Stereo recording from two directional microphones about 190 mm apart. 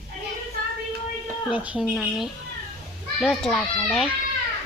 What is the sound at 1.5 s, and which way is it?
A child's voice, 5° right (ahead or behind).